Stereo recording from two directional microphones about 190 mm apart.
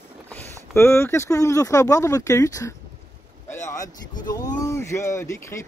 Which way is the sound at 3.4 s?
15° left (ahead or behind).